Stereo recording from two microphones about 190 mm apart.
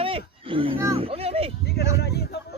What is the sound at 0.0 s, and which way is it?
Roaring cats, 30° right (ahead or behind).